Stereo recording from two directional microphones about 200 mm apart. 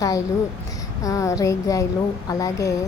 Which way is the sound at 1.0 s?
15° left (ahead or behind).